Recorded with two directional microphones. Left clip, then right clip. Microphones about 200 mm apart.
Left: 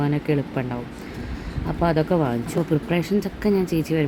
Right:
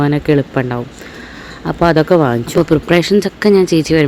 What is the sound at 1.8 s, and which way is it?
Speech, 30° right (ahead or behind).